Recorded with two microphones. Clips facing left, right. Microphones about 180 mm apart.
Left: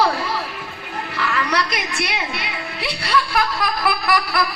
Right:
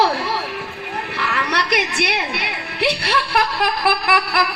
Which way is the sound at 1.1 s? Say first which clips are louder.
Left 2 dB; 65° right (ahead or behind).